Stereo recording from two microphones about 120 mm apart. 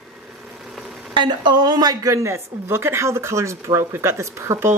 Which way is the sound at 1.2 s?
40° right (ahead or behind).